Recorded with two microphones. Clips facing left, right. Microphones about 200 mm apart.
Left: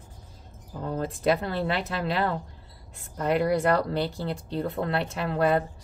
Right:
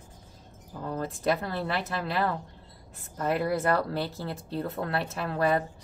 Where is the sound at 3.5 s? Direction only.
5° right (ahead or behind).